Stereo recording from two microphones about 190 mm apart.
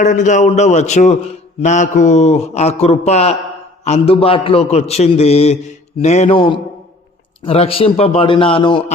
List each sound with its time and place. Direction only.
0.0 s a man's voice: 40° left (ahead or behind)